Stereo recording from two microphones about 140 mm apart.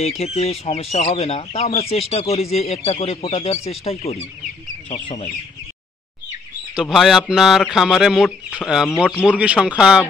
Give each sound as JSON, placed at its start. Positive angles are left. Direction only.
{"t": 0.2, "sound": "speech", "side_deg": 50}
{"t": 6.7, "sound": "speech", "side_deg": -5}